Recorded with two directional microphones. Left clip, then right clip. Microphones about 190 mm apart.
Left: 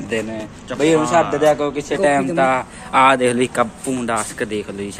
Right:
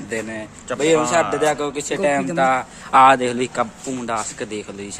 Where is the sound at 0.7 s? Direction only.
50° right (ahead or behind).